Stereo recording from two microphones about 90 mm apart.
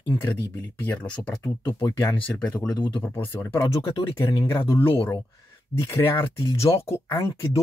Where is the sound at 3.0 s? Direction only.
25° left (ahead or behind).